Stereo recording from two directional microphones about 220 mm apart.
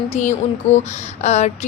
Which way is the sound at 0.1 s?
30° left (ahead or behind).